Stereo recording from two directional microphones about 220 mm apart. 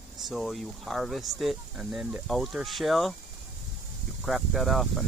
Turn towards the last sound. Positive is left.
turn(degrees=0)  # may be behind; listen again after turning